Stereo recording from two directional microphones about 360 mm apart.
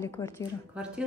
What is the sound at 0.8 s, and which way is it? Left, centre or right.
Speech, centre.